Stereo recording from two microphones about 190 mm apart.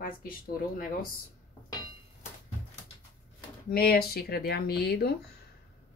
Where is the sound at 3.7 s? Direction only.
55° left (ahead or behind).